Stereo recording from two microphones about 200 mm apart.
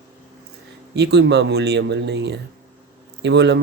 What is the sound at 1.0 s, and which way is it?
Speech, 55° right (ahead or behind).